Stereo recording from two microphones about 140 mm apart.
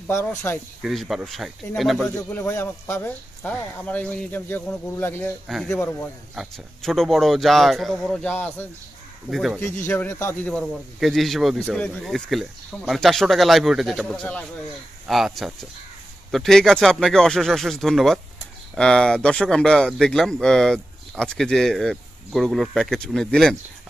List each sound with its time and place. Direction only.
0.0 s speech: 15° left (ahead or behind)
0.8 s speech: centre (ahead or behind)
2.3 s speech: 15° left (ahead or behind)
5.5 s speech: centre (ahead or behind)
5.8 s speech: 10° left (ahead or behind)
6.3 s speech: centre (ahead or behind)
8.3 s speech: 15° left (ahead or behind)
10.5 s speech: centre (ahead or behind)